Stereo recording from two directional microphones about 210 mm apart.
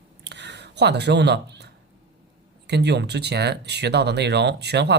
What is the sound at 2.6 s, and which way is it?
Speech, 55° right (ahead or behind).